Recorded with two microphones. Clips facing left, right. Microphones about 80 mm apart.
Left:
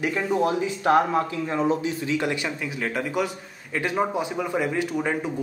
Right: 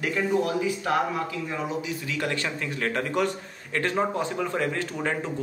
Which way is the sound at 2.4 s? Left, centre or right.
Centre.